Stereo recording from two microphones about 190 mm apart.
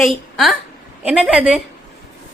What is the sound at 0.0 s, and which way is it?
A woman's voice, centre (ahead or behind).